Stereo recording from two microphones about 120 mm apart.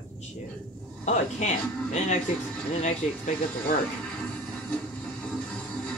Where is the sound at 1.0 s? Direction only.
90° left.